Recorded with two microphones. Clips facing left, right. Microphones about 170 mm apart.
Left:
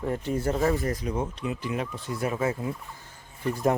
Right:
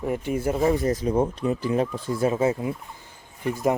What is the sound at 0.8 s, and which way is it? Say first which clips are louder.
Speech: right 7 dB; 25° right (ahead or behind).